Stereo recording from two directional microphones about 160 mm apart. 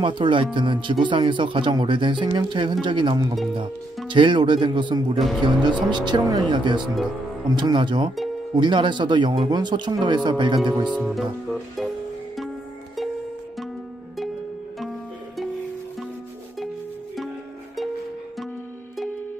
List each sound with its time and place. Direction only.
0.0 s speech: 30° right (ahead or behind)
10.9 s speech: centre (ahead or behind)